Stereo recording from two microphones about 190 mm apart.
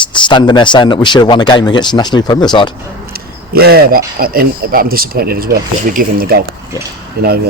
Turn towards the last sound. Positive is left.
turn(degrees=-55)  # may be behind; listen again after turning